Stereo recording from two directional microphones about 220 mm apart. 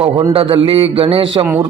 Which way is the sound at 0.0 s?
20° right (ahead or behind).